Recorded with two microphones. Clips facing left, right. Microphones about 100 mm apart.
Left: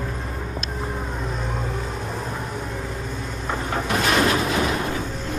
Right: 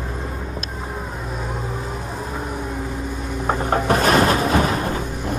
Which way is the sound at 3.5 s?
50° right (ahead or behind).